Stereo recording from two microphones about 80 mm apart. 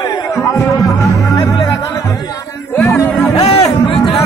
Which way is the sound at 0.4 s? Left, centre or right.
Left.